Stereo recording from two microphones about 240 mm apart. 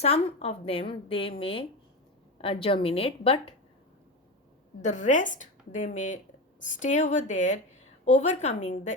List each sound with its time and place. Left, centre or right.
0.0 s a woman's voice: left
4.8 s a woman's voice: left